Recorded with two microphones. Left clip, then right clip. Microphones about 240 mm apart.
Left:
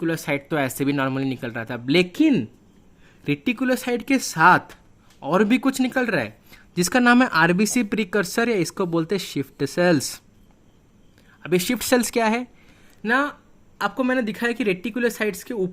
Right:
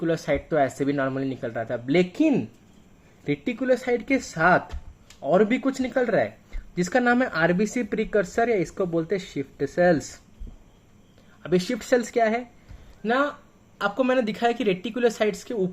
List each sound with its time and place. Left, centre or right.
0.0 s speech: left
3.6 s speech: left
11.4 s speech: left
13.0 s speech: left